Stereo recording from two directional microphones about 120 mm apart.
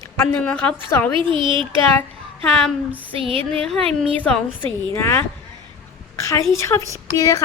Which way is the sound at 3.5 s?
5° left (ahead or behind).